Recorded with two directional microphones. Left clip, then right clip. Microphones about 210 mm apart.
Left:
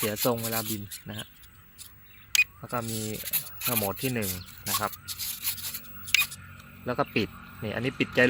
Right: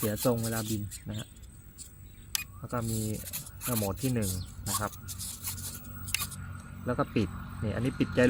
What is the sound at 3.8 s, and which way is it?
Speech, 45° left (ahead or behind).